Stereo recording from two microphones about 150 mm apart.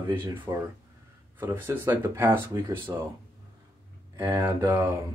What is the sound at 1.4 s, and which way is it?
Speech, 15° right (ahead or behind).